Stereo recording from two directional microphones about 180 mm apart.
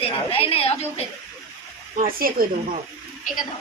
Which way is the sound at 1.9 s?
50° right (ahead or behind).